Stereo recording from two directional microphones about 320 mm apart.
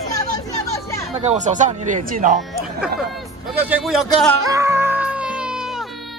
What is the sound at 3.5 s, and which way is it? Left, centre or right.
Speech, centre.